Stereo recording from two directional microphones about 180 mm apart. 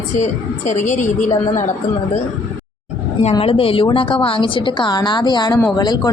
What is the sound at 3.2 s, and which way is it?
A woman's voice, 35° left (ahead or behind).